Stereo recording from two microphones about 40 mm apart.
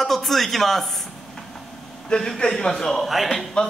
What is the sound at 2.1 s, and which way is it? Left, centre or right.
Speech, left.